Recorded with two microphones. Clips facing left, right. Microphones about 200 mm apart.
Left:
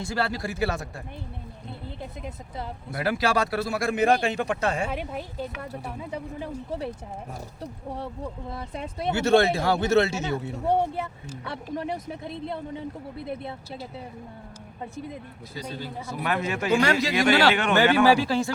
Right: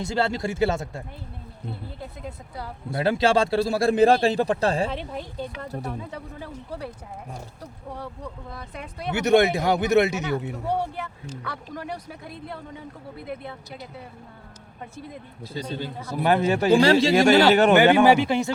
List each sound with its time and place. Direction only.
0.0 s speech: 25° right (ahead or behind)
2.9 s a man's voice: 25° right (ahead or behind)
4.9 s speech: 10° left (ahead or behind); by 9.1 s 25° left (ahead or behind)
9.1 s speech: 20° right (ahead or behind)
10.7 s speech: 25° left (ahead or behind)
15.5 s a man's voice: 25° right (ahead or behind)
17.9 s speech: 20° right (ahead or behind)